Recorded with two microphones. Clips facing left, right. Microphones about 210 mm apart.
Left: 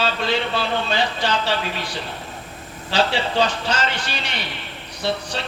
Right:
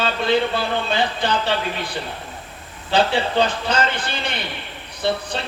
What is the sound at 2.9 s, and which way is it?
Speech, 55° right (ahead or behind).